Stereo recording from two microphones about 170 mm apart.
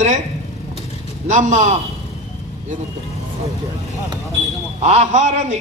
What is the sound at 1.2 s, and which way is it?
Speech, 45° right (ahead or behind).